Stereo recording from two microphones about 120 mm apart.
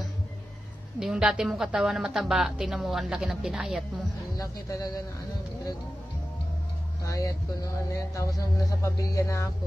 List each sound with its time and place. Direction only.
0.9 s a woman's voice: 5° right (ahead or behind)
4.4 s speech: 30° left (ahead or behind)
7.1 s speech: 25° left (ahead or behind)